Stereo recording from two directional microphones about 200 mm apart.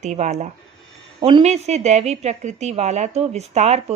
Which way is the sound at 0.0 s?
35° right (ahead or behind).